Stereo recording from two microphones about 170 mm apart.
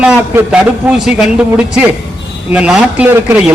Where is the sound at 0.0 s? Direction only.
5° right (ahead or behind).